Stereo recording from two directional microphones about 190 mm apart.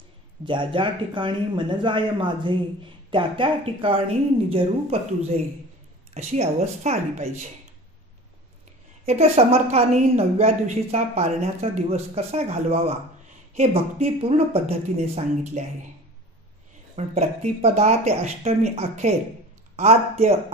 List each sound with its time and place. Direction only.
0.5 s a woman's voice: 25° right (ahead or behind)
9.0 s a woman's voice: 35° right (ahead or behind)
16.9 s a woman's voice: 35° right (ahead or behind)